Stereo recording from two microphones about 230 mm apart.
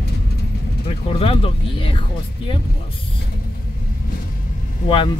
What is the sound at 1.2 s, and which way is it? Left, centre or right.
Speech, left.